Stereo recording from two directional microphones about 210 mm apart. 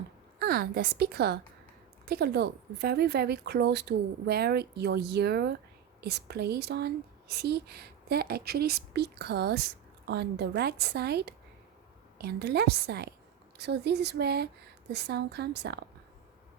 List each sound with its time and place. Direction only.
0.3 s a woman's voice: 45° right (ahead or behind)